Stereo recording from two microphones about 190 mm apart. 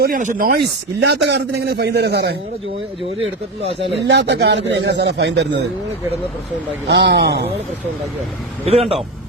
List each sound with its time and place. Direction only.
0.0 s chopping: 45° right (ahead or behind)
1.0 s a man's voice: 60° right (ahead or behind)
3.2 s speech: 30° right (ahead or behind)
3.9 s a man's voice: 65° right (ahead or behind)
6.8 s a man's voice: 65° right (ahead or behind)
8.6 s speech: 30° right (ahead or behind)